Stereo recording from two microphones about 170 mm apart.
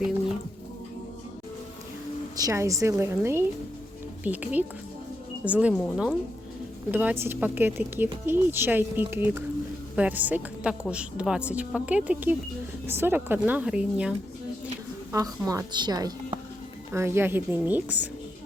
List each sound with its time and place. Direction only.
2.3 s a woman's voice: 20° right (ahead or behind)
15.1 s a woman's voice: 20° right (ahead or behind)